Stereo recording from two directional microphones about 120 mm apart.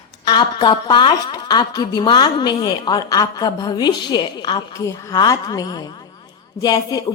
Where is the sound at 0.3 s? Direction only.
40° left (ahead or behind).